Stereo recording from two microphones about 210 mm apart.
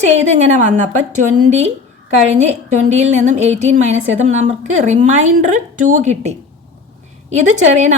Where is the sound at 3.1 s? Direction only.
35° right (ahead or behind).